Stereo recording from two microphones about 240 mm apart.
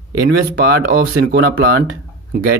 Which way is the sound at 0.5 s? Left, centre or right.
Right.